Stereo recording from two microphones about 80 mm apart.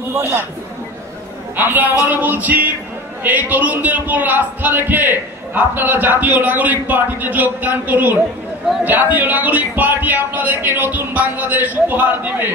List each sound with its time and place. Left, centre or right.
0.1 s a man's voice: right
1.6 s a man's voice: right